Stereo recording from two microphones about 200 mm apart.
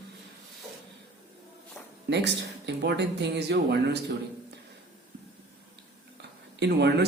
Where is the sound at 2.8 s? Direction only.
60° right (ahead or behind).